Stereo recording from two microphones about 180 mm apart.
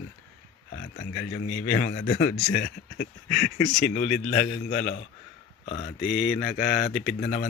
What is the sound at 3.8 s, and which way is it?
A man's voice, 50° left (ahead or behind).